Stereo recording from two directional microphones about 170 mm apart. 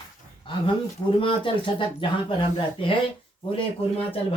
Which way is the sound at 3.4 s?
30° left (ahead or behind).